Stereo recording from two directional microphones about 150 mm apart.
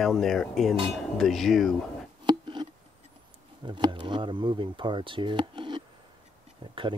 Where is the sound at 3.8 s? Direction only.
30° right (ahead or behind).